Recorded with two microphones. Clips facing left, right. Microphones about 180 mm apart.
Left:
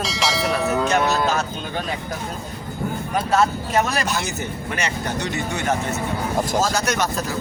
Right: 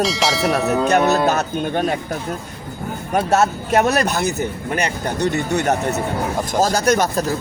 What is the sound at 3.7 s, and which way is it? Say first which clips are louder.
Speech: right 5 dB; 60° right (ahead or behind).